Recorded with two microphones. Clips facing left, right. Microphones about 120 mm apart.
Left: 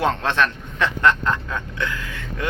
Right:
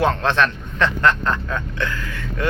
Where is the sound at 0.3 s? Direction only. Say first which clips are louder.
Right 2 dB; 15° left (ahead or behind).